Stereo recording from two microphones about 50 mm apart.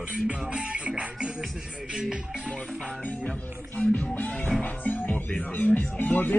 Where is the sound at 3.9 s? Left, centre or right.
Left.